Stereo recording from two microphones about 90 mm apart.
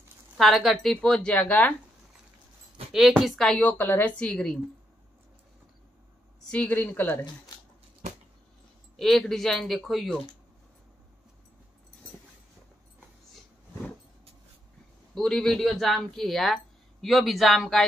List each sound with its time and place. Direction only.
0.4 s a woman's voice: centre (ahead or behind)
2.9 s speech: 5° right (ahead or behind)
3.4 s a woman's voice: 15° left (ahead or behind)
6.4 s a woman's voice: 15° left (ahead or behind)
8.9 s speech: 5° left (ahead or behind)
15.1 s speech: 5° left (ahead or behind)